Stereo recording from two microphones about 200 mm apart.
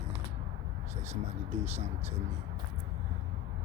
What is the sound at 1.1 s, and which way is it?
Speech, 35° right (ahead or behind).